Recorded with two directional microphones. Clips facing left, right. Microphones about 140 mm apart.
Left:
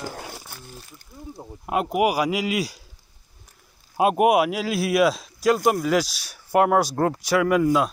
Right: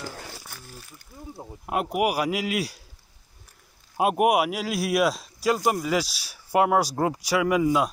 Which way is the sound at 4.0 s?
5° right (ahead or behind).